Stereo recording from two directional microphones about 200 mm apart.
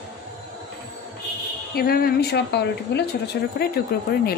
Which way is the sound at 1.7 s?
50° left (ahead or behind).